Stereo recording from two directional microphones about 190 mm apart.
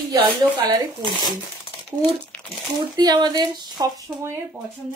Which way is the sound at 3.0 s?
20° right (ahead or behind).